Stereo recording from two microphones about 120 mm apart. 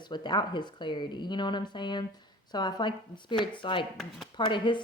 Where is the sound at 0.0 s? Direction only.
40° left (ahead or behind).